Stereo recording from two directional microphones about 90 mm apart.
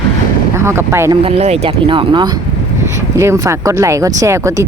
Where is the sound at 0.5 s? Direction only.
30° right (ahead or behind).